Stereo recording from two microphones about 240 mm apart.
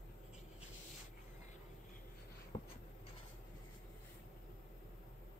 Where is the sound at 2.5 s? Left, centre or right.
Left.